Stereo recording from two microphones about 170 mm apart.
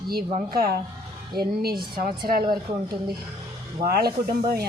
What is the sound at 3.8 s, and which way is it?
Speech, 60° right (ahead or behind).